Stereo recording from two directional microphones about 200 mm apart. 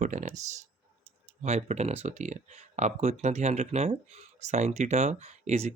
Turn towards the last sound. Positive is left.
turn(degrees=-35)  # may be behind; listen again after turning